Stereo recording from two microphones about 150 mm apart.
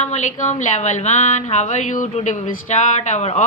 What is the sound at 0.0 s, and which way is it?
A woman's voice, 50° left (ahead or behind).